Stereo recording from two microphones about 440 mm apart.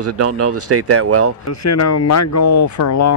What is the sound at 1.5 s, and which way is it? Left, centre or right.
Speech, left.